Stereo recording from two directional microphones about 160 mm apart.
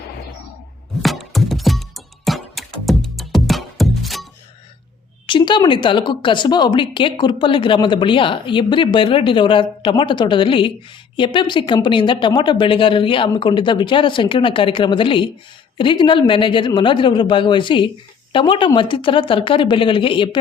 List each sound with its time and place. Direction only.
1.0 s music: centre (ahead or behind)
5.2 s speech: 30° left (ahead or behind)